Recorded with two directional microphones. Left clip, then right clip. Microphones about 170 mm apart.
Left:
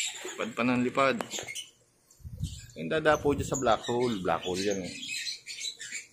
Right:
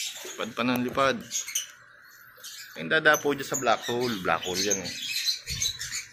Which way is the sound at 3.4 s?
20° left (ahead or behind).